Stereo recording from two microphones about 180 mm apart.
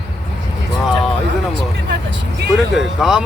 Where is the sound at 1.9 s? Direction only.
80° right.